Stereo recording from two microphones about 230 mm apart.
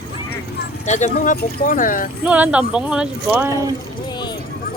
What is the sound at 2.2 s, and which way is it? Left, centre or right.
Speech, centre.